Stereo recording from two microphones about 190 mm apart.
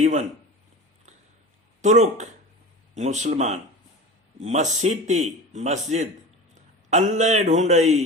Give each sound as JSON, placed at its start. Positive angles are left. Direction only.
{"t": 0.0, "sound": "speech", "side_deg": -40}
{"t": 1.8, "sound": "a man's voice", "side_deg": -40}